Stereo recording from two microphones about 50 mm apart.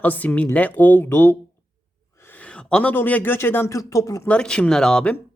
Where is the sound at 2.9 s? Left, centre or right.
Left.